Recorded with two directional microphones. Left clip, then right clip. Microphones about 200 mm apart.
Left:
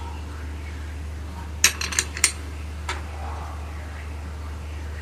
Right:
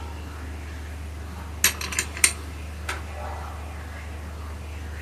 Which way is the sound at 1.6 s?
20° left (ahead or behind).